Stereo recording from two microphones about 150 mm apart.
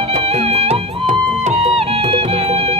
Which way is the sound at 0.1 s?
45° right (ahead or behind).